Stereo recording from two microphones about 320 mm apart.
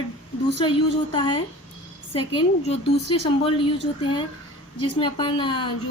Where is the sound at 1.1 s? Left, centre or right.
Centre.